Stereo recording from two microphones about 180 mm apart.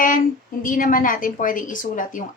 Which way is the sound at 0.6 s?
50° left (ahead or behind).